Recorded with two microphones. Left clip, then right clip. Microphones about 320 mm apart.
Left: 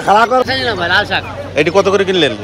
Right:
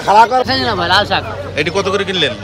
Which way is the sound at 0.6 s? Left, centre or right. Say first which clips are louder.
Even; right.